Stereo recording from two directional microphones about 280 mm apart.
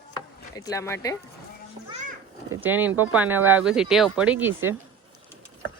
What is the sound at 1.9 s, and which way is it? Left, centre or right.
Children playing, right.